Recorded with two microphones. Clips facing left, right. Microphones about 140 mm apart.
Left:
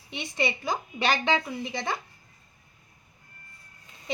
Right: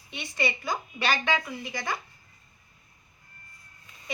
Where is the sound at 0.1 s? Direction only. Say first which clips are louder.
Left 1 dB; 20° left (ahead or behind).